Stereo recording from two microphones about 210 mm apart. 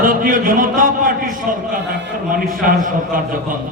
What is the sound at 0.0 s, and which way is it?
A man's voice, 40° right (ahead or behind).